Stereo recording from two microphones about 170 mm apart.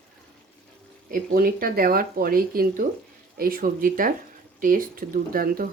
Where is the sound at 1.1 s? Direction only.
55° right (ahead or behind).